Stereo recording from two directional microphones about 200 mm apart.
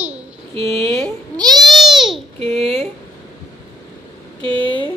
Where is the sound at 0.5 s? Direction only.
30° right (ahead or behind).